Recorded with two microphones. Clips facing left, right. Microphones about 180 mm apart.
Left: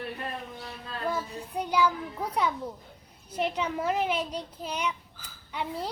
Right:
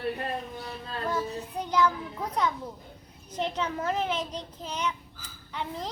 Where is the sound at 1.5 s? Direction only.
10° left (ahead or behind).